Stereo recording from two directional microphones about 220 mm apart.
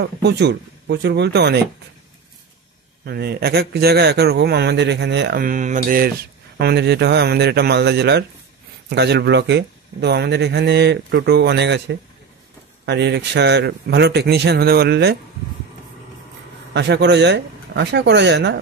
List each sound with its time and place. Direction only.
0.0 s speech: 50° right (ahead or behind)
3.1 s speech: 45° right (ahead or behind)
6.6 s speech: 50° right (ahead or behind)
16.7 s speech: 50° right (ahead or behind)